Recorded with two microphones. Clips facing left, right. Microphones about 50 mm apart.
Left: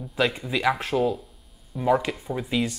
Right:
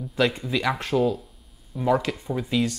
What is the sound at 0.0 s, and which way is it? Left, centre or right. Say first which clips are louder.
Speech: right 1 dB; centre.